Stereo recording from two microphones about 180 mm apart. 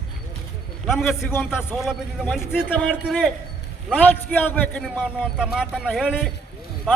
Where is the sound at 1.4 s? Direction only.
5° right (ahead or behind).